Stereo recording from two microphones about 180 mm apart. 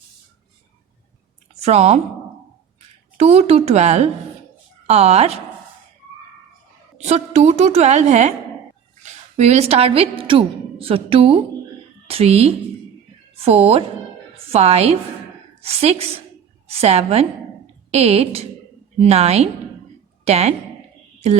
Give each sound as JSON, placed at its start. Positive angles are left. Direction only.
{"t": 1.5, "sound": "a woman's voice", "side_deg": -35}
{"t": 3.2, "sound": "a woman's voice", "side_deg": -35}
{"t": 7.0, "sound": "a woman's voice", "side_deg": -40}